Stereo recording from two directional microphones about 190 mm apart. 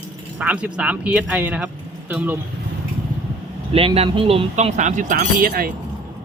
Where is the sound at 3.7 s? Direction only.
30° right (ahead or behind); by 5.7 s 50° right (ahead or behind).